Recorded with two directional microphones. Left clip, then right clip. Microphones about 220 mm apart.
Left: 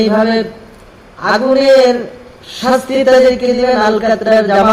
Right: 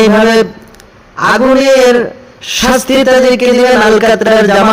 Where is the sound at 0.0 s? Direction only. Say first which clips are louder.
Right 5 dB; 25° right (ahead or behind).